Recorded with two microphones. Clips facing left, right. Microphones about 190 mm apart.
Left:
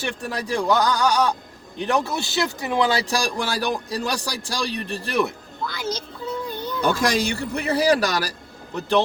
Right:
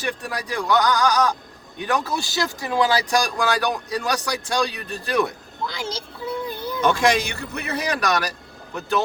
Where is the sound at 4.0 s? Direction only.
30° left (ahead or behind).